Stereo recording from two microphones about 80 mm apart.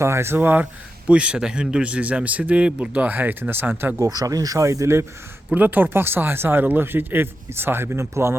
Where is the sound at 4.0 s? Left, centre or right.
Right.